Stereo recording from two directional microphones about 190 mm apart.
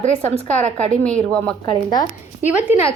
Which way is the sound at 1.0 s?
5° left (ahead or behind).